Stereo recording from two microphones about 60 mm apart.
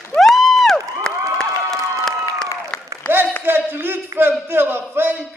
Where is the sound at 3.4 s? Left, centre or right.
Right.